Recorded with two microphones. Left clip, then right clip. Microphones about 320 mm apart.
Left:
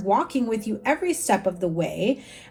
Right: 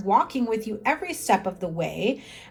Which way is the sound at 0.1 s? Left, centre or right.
Centre.